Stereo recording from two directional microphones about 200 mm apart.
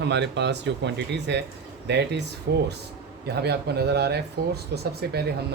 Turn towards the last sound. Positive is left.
turn(degrees=-55)  # may be behind; listen again after turning